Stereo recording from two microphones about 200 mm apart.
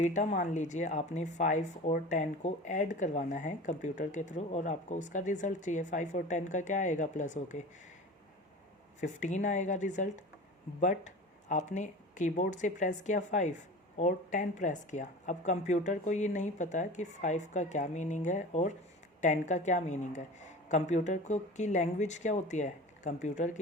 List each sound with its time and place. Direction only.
0.0 s speech: 35° left (ahead or behind)
9.0 s speech: 35° left (ahead or behind)